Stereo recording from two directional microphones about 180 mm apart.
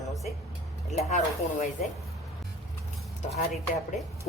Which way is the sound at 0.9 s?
35° left (ahead or behind).